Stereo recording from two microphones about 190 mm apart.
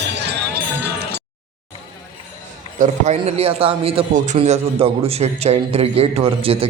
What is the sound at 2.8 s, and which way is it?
A man's voice, 35° right (ahead or behind).